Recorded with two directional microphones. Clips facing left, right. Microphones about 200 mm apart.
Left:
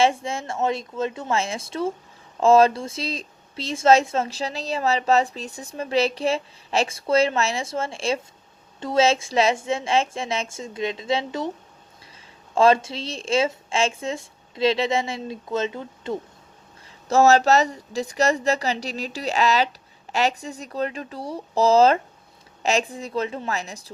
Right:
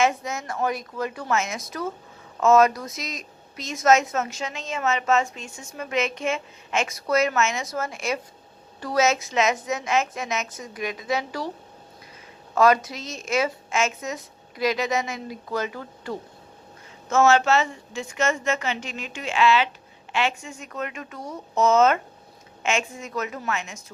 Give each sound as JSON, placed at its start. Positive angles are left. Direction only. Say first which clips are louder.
{"t": 0.0, "sound": "a woman's voice", "louder": "left 2 dB", "side_deg": 30}
{"t": 12.5, "sound": "a woman's voice", "louder": "left 2 dB", "side_deg": 30}
{"t": 17.1, "sound": "speech", "louder": "left 3 dB", "side_deg": 35}